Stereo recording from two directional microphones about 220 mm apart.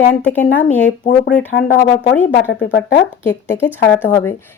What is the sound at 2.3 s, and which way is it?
Speech, 50° left (ahead or behind).